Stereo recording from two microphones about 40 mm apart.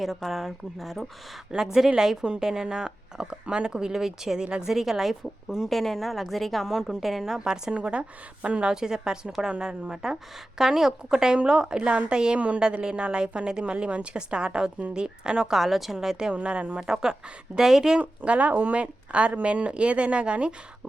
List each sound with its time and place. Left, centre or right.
0.0 s speech: centre
5.6 s speech: centre
6.7 s speech: centre
7.7 s a woman's voice: right
8.6 s a woman's voice: centre
16.3 s a woman's voice: right
18.3 s speech: right
18.8 s a woman's voice: right